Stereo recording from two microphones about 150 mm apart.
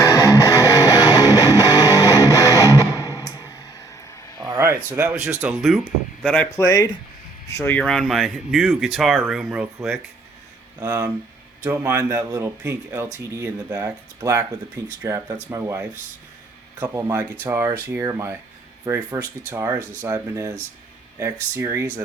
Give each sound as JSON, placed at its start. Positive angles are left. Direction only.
{"t": 0.0, "sound": "music", "side_deg": 20}
{"t": 4.4, "sound": "a sound", "side_deg": -20}
{"t": 5.3, "sound": "speech", "side_deg": -15}
{"t": 6.2, "sound": "speech", "side_deg": 10}
{"t": 6.6, "sound": "speech", "side_deg": 25}
{"t": 10.8, "sound": "speech", "side_deg": -20}